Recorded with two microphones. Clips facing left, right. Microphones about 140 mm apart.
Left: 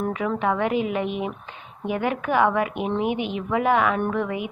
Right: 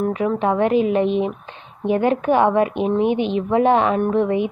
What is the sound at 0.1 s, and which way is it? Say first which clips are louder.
A woman's voice: right 4 dB; 25° right (ahead or behind).